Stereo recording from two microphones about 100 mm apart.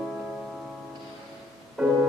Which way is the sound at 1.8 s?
5° right (ahead or behind).